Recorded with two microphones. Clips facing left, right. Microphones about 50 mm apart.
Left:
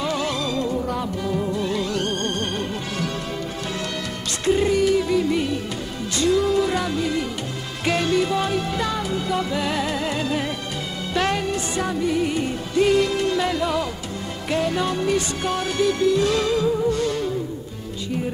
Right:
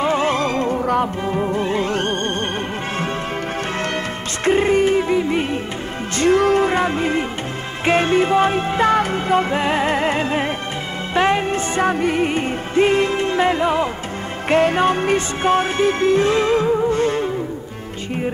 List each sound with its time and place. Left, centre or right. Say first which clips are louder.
0.0 s music: right 6 dB; right
1.2 s music: right 4 dB; right
4.5 s music: right 3 dB; right
6.1 s music: right 4 dB; right
14.5 s music: right 7 dB; right